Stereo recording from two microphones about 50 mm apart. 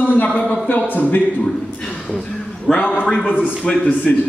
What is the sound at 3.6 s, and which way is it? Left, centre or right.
Speech, left.